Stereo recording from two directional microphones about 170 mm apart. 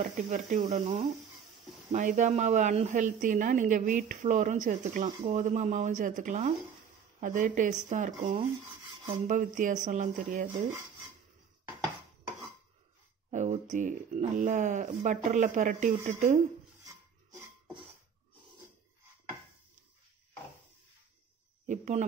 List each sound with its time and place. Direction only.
0.1 s a woman's voice: 50° right (ahead or behind)
13.3 s a woman's voice: 45° right (ahead or behind)
21.6 s a woman's voice: 45° right (ahead or behind)